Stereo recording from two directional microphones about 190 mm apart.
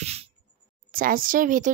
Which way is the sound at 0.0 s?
35° right (ahead or behind).